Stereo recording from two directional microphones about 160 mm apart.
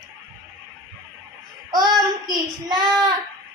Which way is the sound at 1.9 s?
25° right (ahead or behind).